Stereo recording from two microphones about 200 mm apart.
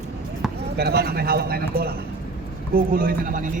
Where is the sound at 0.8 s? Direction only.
55° right (ahead or behind).